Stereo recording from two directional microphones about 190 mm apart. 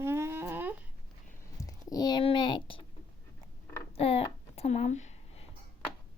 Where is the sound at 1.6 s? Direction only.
20° left (ahead or behind).